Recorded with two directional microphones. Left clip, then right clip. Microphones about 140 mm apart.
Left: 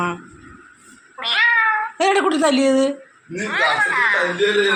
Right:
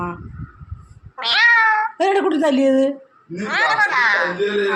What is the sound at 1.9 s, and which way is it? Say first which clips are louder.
A woman's voice: even; 25° right (ahead or behind).